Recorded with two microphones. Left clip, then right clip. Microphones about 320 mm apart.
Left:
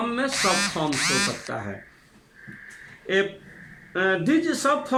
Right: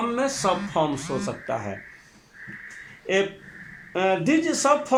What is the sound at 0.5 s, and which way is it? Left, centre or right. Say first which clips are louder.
Music: even; left.